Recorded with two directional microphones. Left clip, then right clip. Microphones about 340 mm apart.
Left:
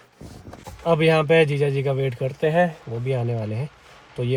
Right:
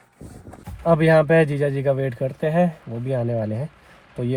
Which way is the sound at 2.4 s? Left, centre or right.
Centre.